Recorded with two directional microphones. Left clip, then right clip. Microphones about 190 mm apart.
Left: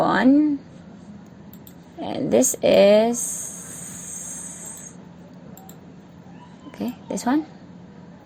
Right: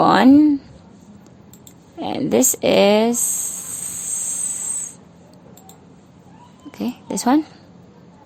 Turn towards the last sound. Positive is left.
turn(degrees=-20)  # may be behind; listen again after turning